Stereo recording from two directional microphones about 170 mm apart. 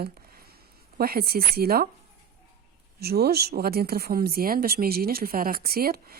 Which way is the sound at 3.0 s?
70° right (ahead or behind).